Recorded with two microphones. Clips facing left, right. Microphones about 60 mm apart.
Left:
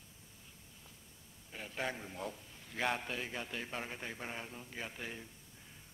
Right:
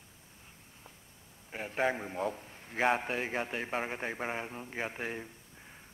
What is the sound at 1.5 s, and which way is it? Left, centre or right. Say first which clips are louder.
A man's voice: right 9 dB; right.